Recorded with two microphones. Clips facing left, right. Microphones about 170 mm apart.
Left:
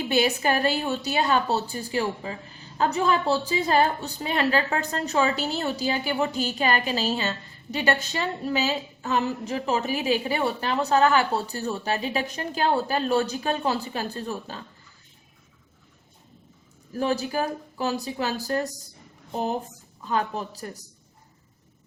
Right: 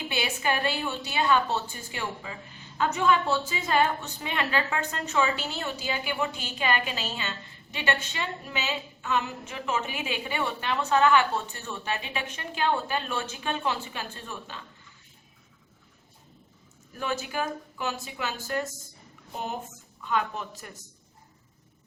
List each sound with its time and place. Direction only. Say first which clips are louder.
0.1 s a woman's voice: left 7 dB; 40° left (ahead or behind)
16.9 s a woman's voice: left 6 dB; 35° left (ahead or behind)